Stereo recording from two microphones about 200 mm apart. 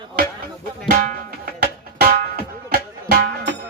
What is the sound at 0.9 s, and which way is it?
Music, 45° right (ahead or behind).